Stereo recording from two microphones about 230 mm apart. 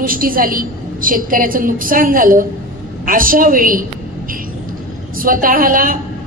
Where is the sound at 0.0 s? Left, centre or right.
Right.